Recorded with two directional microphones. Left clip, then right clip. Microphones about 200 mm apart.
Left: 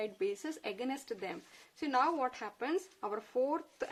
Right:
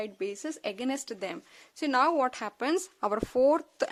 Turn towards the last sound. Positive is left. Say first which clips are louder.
# right 10 dB
turn(degrees=-60)  # may be behind; listen again after turning